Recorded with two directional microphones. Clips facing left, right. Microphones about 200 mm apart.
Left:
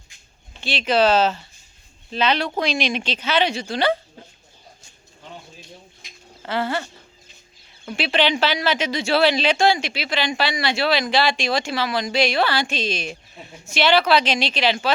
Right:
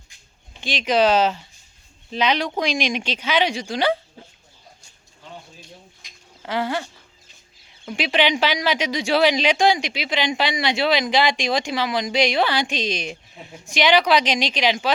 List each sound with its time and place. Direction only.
0.6 s speech: 15° right (ahead or behind)
6.4 s speech: 15° right (ahead or behind)